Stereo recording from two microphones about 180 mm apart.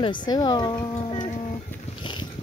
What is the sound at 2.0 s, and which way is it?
Boat, 25° left (ahead or behind).